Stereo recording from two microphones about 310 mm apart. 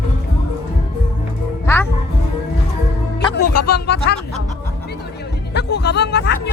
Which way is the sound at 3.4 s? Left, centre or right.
Left.